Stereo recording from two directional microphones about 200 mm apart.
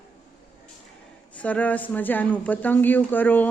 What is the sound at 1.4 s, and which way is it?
A man's voice, 5° left (ahead or behind).